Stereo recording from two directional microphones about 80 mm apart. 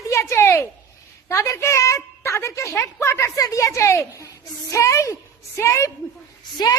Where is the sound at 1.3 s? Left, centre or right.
Left.